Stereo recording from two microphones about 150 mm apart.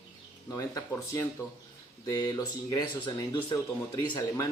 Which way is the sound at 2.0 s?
25° left (ahead or behind).